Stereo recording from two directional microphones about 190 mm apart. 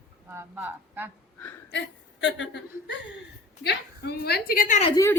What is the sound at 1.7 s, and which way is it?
A woman's voice, 75° left (ahead or behind).